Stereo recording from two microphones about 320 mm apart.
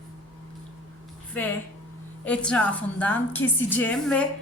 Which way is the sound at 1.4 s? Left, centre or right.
Centre.